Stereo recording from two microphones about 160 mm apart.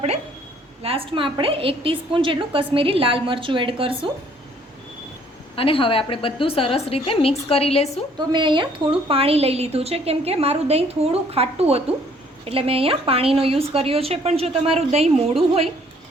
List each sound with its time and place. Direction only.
0.8 s a woman's voice: 35° right (ahead or behind)
5.5 s a woman's voice: 35° left (ahead or behind)
8.3 s a woman's voice: 30° right (ahead or behind)